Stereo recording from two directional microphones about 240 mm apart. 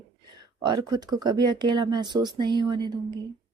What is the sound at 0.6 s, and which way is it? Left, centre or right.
Speech, centre.